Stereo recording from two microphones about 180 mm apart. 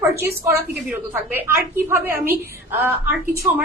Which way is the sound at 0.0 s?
15° right (ahead or behind).